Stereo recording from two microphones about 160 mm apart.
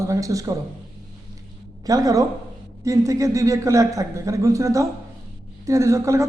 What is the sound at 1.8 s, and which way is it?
A man's voice, 20° right (ahead or behind).